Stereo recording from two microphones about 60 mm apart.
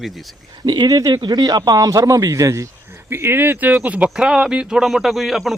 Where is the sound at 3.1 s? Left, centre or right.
Right.